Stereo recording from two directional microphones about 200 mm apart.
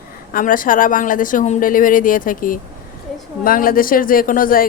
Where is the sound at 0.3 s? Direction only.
45° left (ahead or behind).